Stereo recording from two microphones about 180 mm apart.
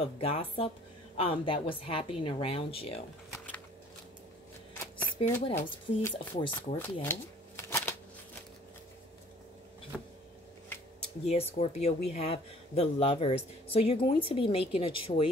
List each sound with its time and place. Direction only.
0.0 s a woman's voice: 30° left (ahead or behind)
5.1 s speech: 15° left (ahead or behind)
6.8 s shuffling cards: 10° left (ahead or behind)
9.9 s vehicle: centre (ahead or behind)
11.0 s speech: 35° left (ahead or behind)